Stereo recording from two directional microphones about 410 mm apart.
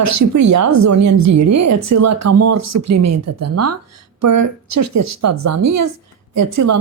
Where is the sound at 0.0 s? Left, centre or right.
Right.